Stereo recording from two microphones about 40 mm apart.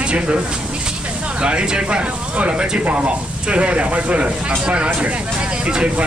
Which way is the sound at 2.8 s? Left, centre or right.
Right.